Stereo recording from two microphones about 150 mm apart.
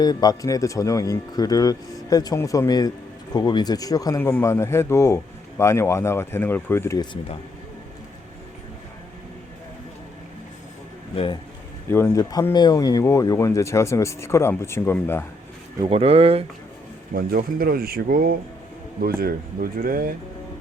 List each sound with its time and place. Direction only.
0.0 s speech: 25° left (ahead or behind)
11.9 s speech: 15° left (ahead or behind)
15.8 s speech: 40° right (ahead or behind)
17.2 s speech: 80° right